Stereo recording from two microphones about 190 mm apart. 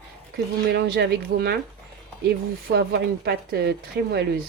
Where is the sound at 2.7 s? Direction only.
55° right (ahead or behind).